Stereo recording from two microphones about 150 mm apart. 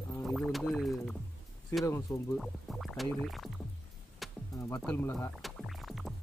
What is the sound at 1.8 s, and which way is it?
Speech, 20° left (ahead or behind).